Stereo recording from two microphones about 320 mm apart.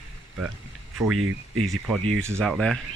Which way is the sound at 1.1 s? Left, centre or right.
Right.